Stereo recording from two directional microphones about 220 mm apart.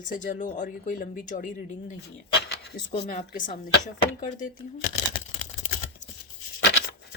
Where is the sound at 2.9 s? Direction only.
35° left (ahead or behind).